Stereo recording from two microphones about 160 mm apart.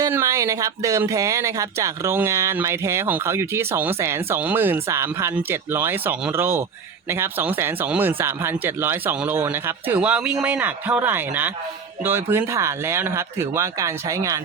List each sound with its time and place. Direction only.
0.0 s speech: 20° right (ahead or behind)